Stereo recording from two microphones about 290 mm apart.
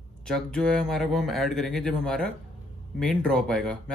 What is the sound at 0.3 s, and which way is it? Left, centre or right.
Speech, centre.